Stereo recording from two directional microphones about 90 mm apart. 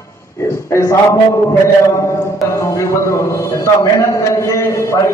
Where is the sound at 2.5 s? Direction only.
35° left (ahead or behind).